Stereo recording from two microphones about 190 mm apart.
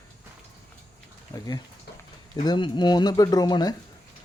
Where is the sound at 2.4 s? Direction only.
25° left (ahead or behind).